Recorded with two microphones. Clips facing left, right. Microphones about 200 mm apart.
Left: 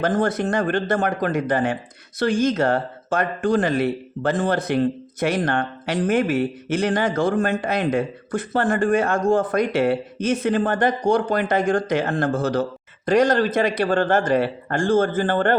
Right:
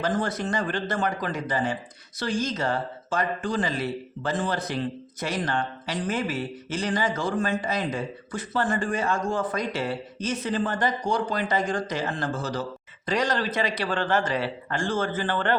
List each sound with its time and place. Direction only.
0.0 s speech: 55° left (ahead or behind)